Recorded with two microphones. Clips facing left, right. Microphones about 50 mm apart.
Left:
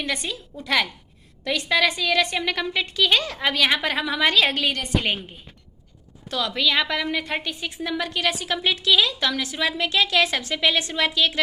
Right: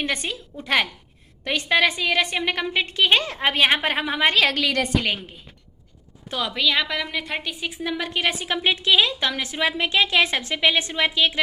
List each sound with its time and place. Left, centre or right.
0.0 s a woman's voice: right
4.4 s a woman's voice: right
6.5 s a woman's voice: centre
8.1 s a woman's voice: right